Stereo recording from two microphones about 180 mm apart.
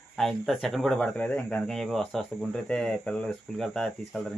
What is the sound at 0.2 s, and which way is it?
Speech, centre (ahead or behind).